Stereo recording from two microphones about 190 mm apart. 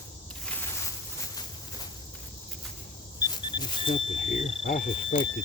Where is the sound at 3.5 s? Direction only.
30° left (ahead or behind).